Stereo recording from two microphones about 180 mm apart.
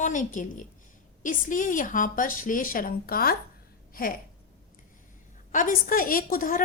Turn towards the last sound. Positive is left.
turn(degrees=50)  # may be behind; listen again after turning